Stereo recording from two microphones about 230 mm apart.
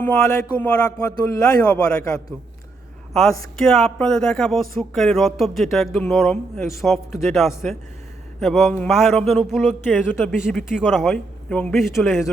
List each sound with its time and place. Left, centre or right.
0.6 s a man's voice: centre